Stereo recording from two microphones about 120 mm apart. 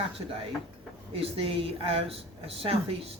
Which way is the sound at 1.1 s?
50° right (ahead or behind).